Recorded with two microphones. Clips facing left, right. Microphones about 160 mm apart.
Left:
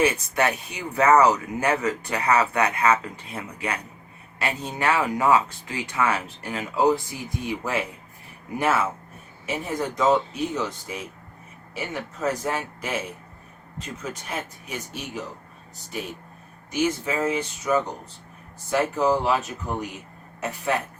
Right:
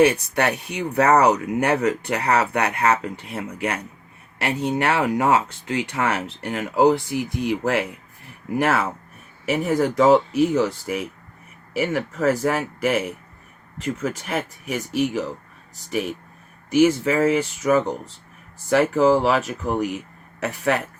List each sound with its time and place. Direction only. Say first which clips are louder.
0.0 s speech: right 4 dB; 65° right (ahead or behind)
16.7 s speech: right 8 dB; 75° right (ahead or behind)
18.7 s speech: right 5 dB; 90° right